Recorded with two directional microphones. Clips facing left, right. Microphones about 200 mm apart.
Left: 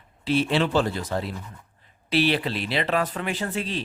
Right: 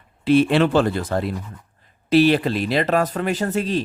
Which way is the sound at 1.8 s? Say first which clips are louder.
Right 8 dB; 45° right (ahead or behind).